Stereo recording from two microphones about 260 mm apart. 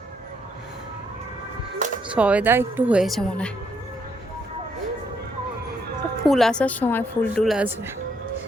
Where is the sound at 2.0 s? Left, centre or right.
Centre.